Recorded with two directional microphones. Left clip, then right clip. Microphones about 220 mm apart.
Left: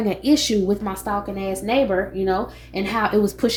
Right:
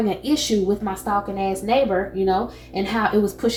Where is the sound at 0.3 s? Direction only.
40° left (ahead or behind).